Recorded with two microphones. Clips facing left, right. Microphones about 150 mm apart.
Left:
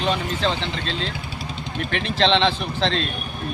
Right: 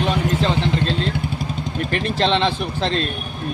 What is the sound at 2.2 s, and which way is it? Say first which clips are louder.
Speech: left 1 dB; 5° right (ahead or behind).